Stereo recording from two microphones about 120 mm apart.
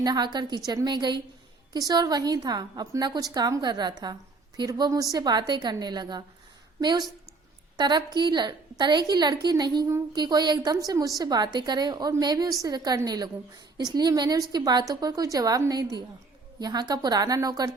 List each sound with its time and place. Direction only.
0.0 s a woman's voice: 35° right (ahead or behind)
7.8 s a woman's voice: 35° right (ahead or behind)